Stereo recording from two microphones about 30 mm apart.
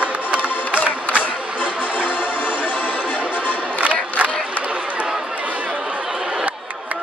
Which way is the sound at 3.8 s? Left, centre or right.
Right.